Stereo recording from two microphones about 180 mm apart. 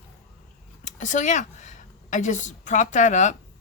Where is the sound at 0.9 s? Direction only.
45° left (ahead or behind).